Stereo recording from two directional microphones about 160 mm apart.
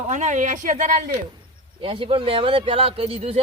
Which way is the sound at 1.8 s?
35° right (ahead or behind).